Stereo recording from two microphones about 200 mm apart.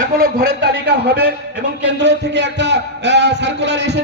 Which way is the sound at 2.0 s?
60° right (ahead or behind).